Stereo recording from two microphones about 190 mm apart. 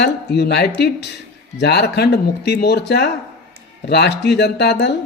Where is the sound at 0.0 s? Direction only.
60° left (ahead or behind).